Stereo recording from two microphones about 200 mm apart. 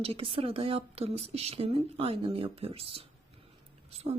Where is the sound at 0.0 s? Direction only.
30° right (ahead or behind).